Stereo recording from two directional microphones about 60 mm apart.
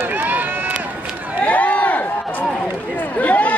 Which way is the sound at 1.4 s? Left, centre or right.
Left.